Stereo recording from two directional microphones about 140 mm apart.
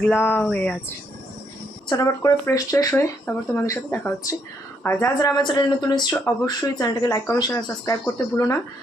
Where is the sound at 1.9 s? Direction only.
25° left (ahead or behind).